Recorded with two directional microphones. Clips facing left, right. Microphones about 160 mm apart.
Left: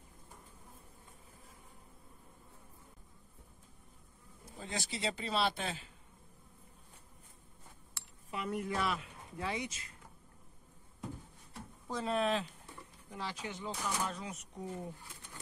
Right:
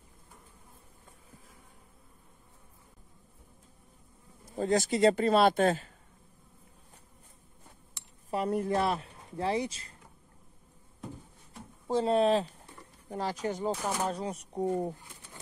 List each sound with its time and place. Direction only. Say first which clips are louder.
4.6 s speech: right 15 dB; 45° right (ahead or behind)
8.0 s a sound: even; 15° right (ahead or behind)
8.3 s speech: right 8 dB; 35° right (ahead or behind)
11.9 s speech: right 8 dB; 30° right (ahead or behind)
13.1 s speech: right 9 dB; 45° right (ahead or behind)
14.5 s speech: right 15 dB; 50° right (ahead or behind)